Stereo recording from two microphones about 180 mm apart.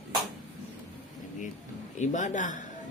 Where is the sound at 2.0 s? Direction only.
45° left (ahead or behind).